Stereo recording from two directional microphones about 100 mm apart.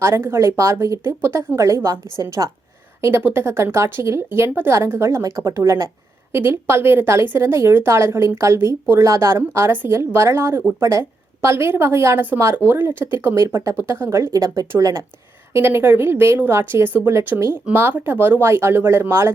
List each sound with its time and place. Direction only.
0.0 s speech: 25° right (ahead or behind)